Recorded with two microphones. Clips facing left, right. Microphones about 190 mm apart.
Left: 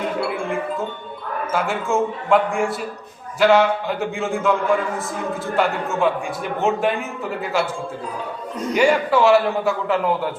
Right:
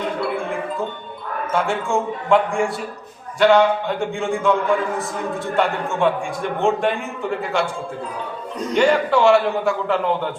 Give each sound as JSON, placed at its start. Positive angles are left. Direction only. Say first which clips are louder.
{"t": 1.5, "sound": "a man's voice", "louder": "even", "side_deg": 0}
{"t": 8.7, "sound": "a man's voice", "louder": "right 1 dB", "side_deg": 5}